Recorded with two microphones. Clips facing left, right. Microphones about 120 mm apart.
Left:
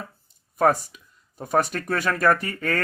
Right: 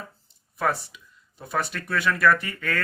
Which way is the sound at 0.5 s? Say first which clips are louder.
Left 6 dB; 45° left (ahead or behind).